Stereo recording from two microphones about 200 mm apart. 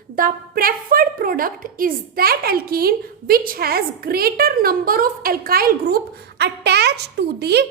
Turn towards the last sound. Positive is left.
turn(degrees=-55)  # may be behind; listen again after turning